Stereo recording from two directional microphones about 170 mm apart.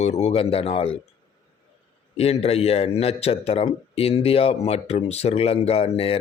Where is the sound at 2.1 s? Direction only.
40° left (ahead or behind).